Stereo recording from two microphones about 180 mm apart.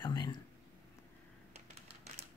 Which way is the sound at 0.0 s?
25° left (ahead or behind).